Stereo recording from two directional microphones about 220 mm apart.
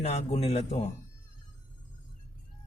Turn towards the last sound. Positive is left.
turn(degrees=30)  # may be behind; listen again after turning